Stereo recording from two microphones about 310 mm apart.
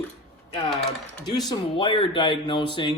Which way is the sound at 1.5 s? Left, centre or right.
Centre.